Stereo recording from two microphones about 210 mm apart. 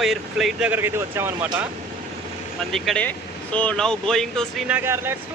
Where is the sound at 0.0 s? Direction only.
Centre (ahead or behind).